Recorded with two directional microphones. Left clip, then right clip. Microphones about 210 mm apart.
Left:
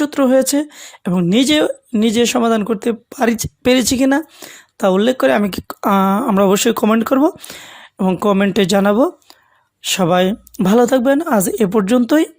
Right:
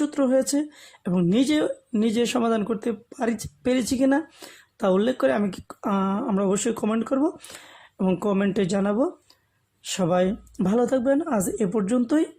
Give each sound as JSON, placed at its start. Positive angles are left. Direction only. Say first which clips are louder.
{"t": 0.0, "sound": "speech", "louder": "left 8 dB", "side_deg": 35}